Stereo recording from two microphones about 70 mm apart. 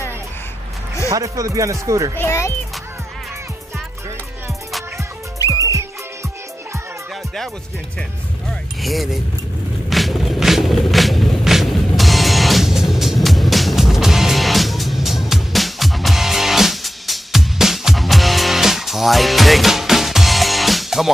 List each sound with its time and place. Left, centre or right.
1.1 s speech: right
2.1 s a child's voice: left
5.5 s music: right
8.5 s mechanisms: centre
9.8 s music: centre